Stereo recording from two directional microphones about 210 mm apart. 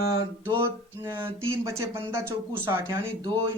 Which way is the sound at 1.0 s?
10° right (ahead or behind).